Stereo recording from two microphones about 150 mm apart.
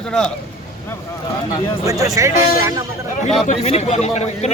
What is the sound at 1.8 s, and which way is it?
Speech, 20° right (ahead or behind).